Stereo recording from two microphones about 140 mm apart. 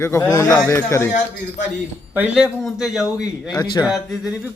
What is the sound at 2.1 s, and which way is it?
Speech, 5° right (ahead or behind).